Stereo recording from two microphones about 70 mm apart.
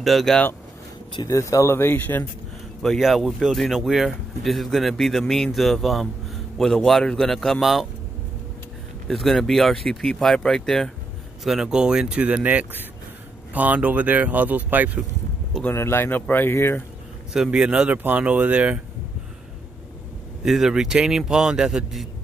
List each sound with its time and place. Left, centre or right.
0.0 s speech: centre
1.2 s speech: left
2.8 s speech: centre
9.0 s speech: centre
11.4 s a man's voice: centre; by 14.9 s right
15.7 s speech: left
17.3 s a man's voice: centre
20.4 s a man's voice: centre